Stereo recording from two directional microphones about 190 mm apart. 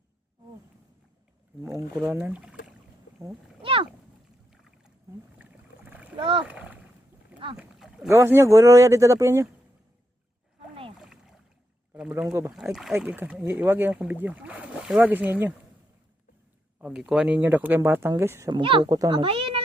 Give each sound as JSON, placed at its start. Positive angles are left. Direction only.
{"t": 1.6, "sound": "speech", "side_deg": -15}
{"t": 3.6, "sound": "boat", "side_deg": -30}
{"t": 5.4, "sound": "a sound", "side_deg": -10}
{"t": 6.1, "sound": "speech", "side_deg": -25}
{"t": 6.4, "sound": "splash", "side_deg": -5}
{"t": 7.5, "sound": "speech", "side_deg": -5}
{"t": 11.0, "sound": "rowboat", "side_deg": 0}
{"t": 12.3, "sound": "speech", "side_deg": -15}
{"t": 12.7, "sound": "speech", "side_deg": -5}
{"t": 16.7, "sound": "speech", "side_deg": -5}
{"t": 18.6, "sound": "a child's voice", "side_deg": -25}